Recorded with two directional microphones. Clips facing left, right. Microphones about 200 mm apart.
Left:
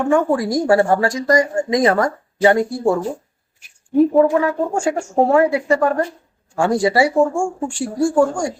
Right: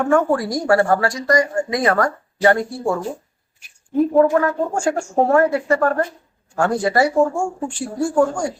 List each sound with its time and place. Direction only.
0.0 s speech: centre (ahead or behind)
0.3 s speech: 15° left (ahead or behind)
3.9 s speech: 5° left (ahead or behind)